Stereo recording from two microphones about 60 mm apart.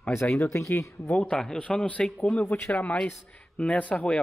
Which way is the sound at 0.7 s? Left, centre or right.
Left.